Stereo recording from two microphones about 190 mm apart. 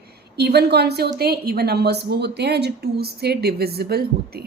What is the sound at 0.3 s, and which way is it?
Speech, 60° right (ahead or behind).